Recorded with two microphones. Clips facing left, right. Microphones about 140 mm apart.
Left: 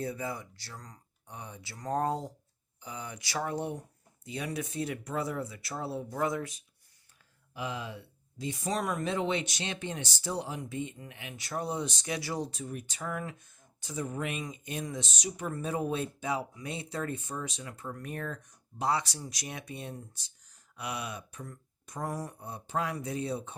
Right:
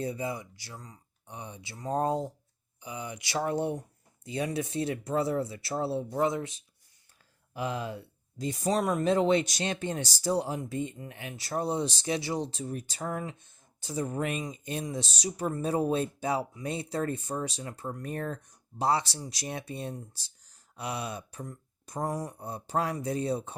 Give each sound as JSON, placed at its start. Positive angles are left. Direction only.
{"t": 0.0, "sound": "speech", "side_deg": -20}
{"t": 7.5, "sound": "speech", "side_deg": -45}
{"t": 22.3, "sound": "speech", "side_deg": -35}